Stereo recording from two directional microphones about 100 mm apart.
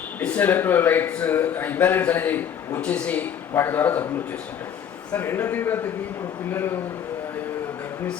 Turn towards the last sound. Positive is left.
turn(degrees=20)  # may be behind; listen again after turning